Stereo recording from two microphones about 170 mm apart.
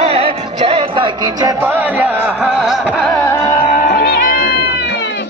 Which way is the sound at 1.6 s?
10° right (ahead or behind).